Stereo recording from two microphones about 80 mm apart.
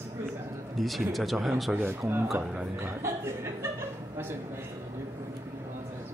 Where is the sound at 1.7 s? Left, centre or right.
Right.